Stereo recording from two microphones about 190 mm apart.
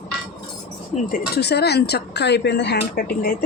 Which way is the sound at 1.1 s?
60° left (ahead or behind).